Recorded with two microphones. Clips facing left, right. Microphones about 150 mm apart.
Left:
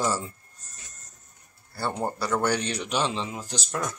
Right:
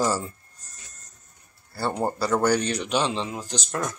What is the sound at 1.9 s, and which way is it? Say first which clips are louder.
A man's voice: right 4 dB; 15° right (ahead or behind).